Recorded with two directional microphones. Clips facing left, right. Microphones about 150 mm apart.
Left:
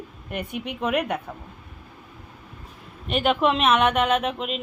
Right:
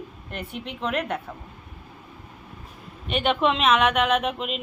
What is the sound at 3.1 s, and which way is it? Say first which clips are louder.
Music: left 1 dB; centre (ahead or behind).